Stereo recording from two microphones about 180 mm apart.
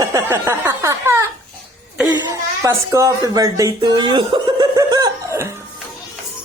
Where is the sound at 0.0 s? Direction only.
15° right (ahead or behind).